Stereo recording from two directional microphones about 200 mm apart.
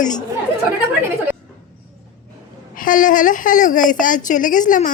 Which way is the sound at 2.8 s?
40° left (ahead or behind).